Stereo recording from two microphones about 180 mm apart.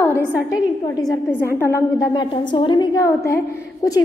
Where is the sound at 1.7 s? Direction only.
20° left (ahead or behind).